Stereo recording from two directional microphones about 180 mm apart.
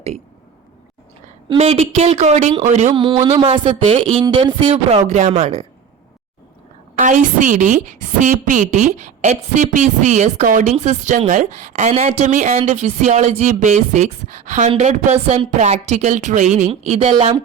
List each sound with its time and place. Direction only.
1.5 s a woman's voice: 35° right (ahead or behind)
2.9 s a woman's voice: 25° right (ahead or behind)
6.9 s a woman's voice: 45° right (ahead or behind); by 17.4 s 30° right (ahead or behind)